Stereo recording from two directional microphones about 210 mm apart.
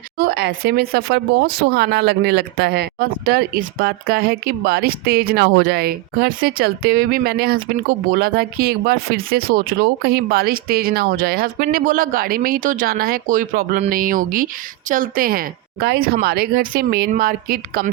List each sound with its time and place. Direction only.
0.2 s speech: 50° right (ahead or behind)